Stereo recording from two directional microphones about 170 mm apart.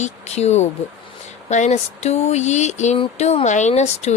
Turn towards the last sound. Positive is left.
turn(degrees=40)  # may be behind; listen again after turning